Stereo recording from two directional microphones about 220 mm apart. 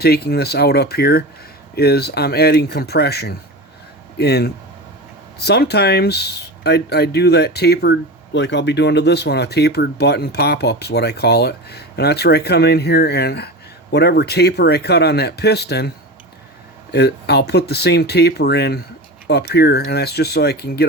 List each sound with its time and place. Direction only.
0.0 s speech: 45° left (ahead or behind)
16.9 s speech: 50° left (ahead or behind)